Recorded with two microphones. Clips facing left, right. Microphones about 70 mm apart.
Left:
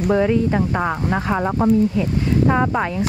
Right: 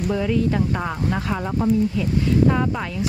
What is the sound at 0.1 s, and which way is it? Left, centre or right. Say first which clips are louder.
Speech: left 7 dB; left.